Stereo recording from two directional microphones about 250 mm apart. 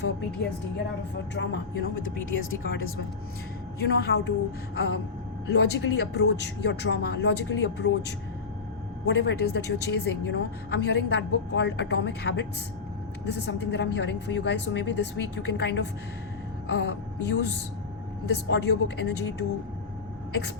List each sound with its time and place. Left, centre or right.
1.1 s a woman's voice: left
3.8 s a woman's voice: left
5.5 s a woman's voice: left
9.0 s a woman's voice: left